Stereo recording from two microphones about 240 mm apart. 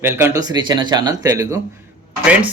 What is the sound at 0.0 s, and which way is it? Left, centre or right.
Speech, centre.